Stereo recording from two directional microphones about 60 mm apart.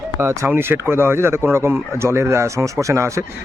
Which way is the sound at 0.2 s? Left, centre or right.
Right.